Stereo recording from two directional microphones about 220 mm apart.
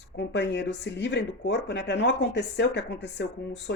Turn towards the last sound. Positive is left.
turn(degrees=50)  # may be behind; listen again after turning